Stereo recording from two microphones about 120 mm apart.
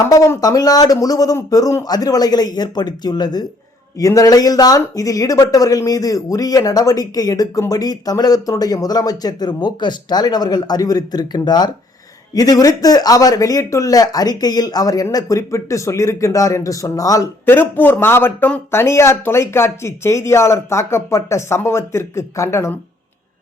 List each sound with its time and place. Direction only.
0.0 s speech: 25° left (ahead or behind)
17.4 s speech: 15° left (ahead or behind)